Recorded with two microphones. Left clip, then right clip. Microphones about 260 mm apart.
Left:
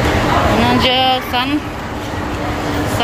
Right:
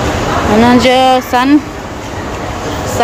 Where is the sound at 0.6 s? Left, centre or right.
Right.